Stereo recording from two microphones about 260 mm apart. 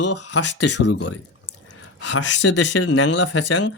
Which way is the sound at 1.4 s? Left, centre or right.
Left.